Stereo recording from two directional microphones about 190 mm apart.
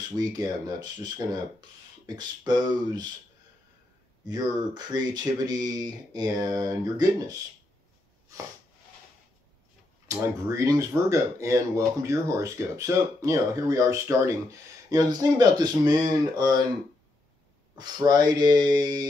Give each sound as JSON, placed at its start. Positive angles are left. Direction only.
{"t": 0.4, "sound": "speech", "side_deg": -20}
{"t": 4.3, "sound": "speech", "side_deg": -20}
{"t": 10.0, "sound": "speech", "side_deg": -15}
{"t": 17.7, "sound": "speech", "side_deg": -20}